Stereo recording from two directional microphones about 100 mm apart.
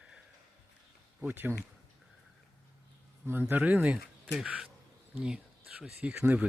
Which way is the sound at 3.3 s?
20° right (ahead or behind).